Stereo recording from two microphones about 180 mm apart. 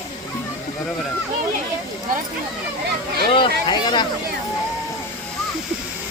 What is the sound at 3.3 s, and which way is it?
Speech, 25° left (ahead or behind).